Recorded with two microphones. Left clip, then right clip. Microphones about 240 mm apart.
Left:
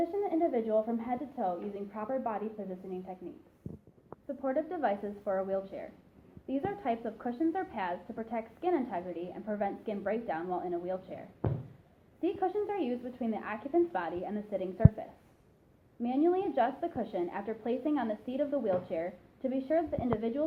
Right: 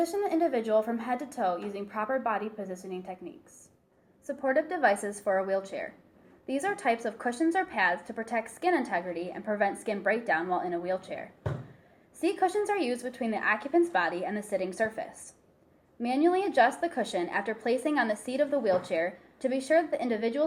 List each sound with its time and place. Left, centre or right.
0.2 s a woman's voice: right
4.4 s a woman's voice: right
12.2 s a woman's voice: right
16.0 s a woman's voice: right